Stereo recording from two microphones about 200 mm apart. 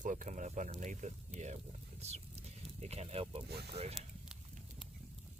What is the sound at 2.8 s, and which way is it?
Speech, 30° right (ahead or behind).